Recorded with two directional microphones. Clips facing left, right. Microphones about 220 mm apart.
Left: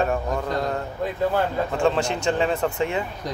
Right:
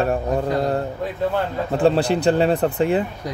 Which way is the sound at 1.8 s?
35° right (ahead or behind).